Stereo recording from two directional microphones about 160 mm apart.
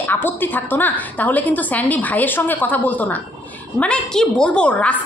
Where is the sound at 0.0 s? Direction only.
10° left (ahead or behind).